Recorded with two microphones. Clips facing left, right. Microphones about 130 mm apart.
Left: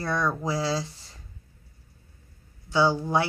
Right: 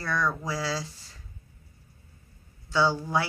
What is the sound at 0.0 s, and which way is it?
Speech, 25° left (ahead or behind).